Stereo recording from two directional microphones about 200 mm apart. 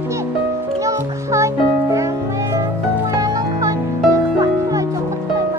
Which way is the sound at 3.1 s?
15° right (ahead or behind).